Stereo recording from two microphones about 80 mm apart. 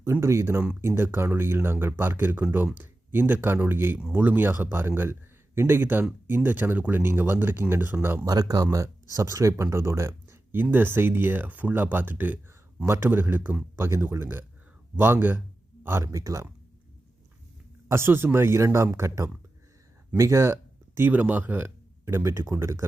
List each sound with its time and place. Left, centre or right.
0.0 s speech: right
8.2 s speech: right
17.8 s speech: right
21.1 s speech: right
22.0 s speech: right